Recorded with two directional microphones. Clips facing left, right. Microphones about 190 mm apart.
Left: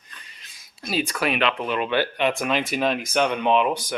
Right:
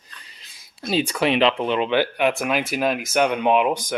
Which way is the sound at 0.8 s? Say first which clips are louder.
Right 4 dB; 25° right (ahead or behind).